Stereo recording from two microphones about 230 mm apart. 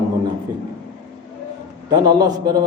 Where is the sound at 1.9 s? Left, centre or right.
Centre.